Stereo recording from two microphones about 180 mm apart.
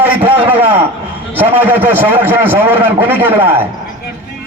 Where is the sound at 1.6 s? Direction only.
10° right (ahead or behind).